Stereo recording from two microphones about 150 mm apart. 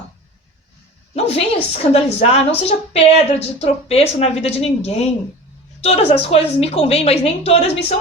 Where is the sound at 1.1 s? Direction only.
40° left (ahead or behind).